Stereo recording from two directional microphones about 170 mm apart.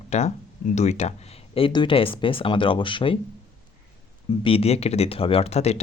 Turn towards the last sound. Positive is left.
turn(degrees=40)  # may be behind; listen again after turning